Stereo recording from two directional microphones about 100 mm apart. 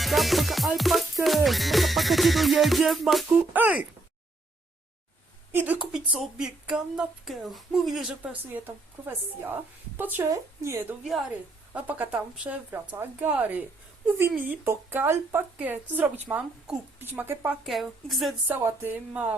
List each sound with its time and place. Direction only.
0.0 s music: centre (ahead or behind)
3.5 s a woman's voice: 15° right (ahead or behind)
5.5 s speech: 15° right (ahead or behind)
5.9 s music: 5° right (ahead or behind)
8.2 s a woman's voice: 15° right (ahead or behind)
11.7 s a woman's voice: 15° right (ahead or behind)
17.6 s music: centre (ahead or behind)
18.4 s a woman's voice: 20° right (ahead or behind)